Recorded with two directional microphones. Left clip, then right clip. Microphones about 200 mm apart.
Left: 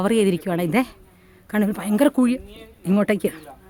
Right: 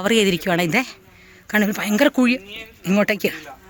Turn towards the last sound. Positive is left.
turn(degrees=10)  # may be behind; listen again after turning